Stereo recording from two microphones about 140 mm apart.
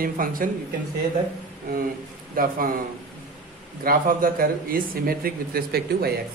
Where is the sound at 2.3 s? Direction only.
90° right.